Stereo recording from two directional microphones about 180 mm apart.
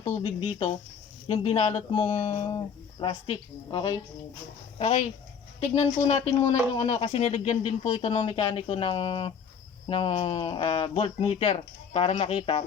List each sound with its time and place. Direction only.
0.2 s speech: 25° left (ahead or behind)
4.8 s speech: 35° left (ahead or behind)